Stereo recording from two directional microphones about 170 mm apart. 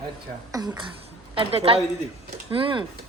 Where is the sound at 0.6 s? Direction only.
25° right (ahead or behind).